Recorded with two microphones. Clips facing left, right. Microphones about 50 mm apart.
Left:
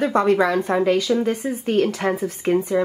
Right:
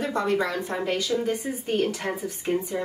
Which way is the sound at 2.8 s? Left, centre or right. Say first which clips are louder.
Left 10 dB; left.